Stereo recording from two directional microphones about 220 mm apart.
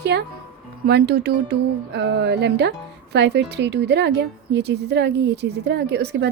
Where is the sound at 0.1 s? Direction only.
50° right (ahead or behind).